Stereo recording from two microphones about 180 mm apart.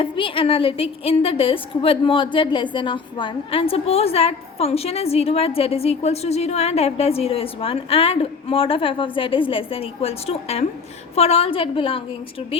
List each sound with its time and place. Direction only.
0.0 s a woman's voice: 30° left (ahead or behind)